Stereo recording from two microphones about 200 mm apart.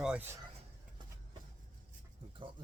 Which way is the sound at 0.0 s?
5° right (ahead or behind).